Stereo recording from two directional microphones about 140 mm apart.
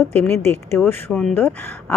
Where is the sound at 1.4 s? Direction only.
10° left (ahead or behind).